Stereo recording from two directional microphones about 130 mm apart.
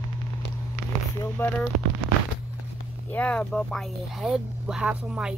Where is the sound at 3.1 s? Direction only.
10° left (ahead or behind).